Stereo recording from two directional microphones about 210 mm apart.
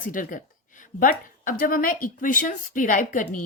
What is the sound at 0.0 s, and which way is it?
A woman's voice, 40° left (ahead or behind).